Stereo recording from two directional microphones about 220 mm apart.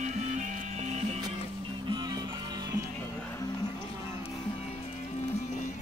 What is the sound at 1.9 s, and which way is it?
Music, 20° right (ahead or behind).